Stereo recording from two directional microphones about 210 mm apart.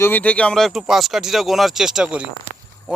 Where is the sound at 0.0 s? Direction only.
10° left (ahead or behind).